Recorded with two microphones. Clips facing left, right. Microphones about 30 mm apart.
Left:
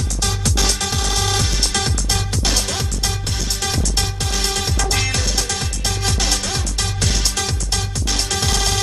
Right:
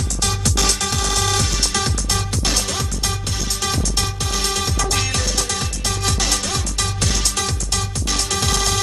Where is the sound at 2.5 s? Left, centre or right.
Left.